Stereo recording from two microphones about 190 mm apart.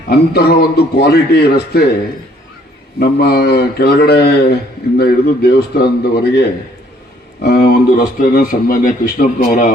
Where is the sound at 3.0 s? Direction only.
55° left (ahead or behind).